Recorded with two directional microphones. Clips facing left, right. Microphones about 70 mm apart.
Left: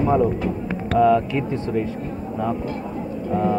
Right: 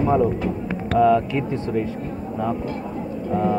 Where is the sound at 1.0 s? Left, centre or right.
Centre.